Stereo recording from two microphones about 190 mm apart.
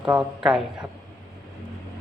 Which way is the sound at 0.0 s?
5° right (ahead or behind).